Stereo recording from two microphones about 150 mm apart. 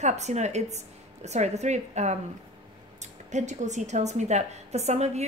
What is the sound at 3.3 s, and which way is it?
Speech, 50° right (ahead or behind).